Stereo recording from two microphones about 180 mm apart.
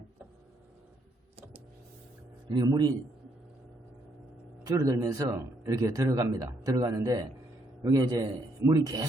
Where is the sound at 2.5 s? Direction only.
20° right (ahead or behind).